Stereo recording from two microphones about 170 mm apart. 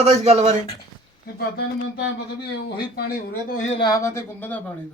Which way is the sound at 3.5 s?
45° left (ahead or behind).